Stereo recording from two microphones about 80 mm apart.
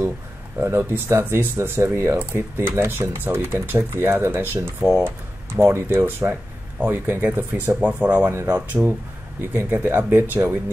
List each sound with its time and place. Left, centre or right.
0.6 s speech: right
4.8 s speech: centre
5.6 s speech: right